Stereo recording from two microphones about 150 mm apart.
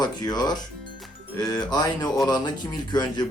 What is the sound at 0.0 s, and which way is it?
Speech, 25° left (ahead or behind).